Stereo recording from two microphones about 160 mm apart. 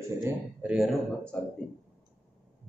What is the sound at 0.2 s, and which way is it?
Speech, 10° right (ahead or behind).